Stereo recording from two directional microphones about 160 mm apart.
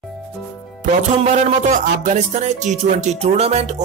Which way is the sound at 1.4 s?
50° right (ahead or behind).